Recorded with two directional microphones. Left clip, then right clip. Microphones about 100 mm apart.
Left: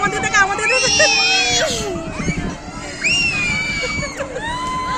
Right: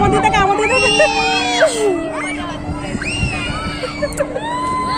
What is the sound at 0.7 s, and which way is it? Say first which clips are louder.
Baby cry: right 2 dB; 15° left (ahead or behind).